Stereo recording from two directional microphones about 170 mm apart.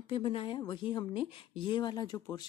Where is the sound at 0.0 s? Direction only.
30° left (ahead or behind).